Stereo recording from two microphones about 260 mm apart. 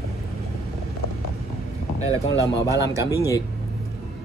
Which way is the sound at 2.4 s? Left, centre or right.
Centre.